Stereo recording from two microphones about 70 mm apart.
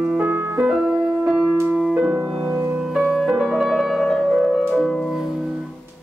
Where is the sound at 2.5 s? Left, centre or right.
Right.